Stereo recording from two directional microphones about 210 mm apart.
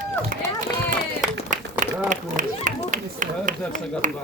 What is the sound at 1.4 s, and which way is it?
Run, 40° right (ahead or behind).